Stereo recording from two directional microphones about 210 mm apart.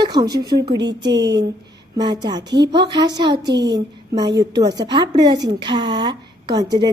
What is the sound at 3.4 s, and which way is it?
Speech, 55° right (ahead or behind).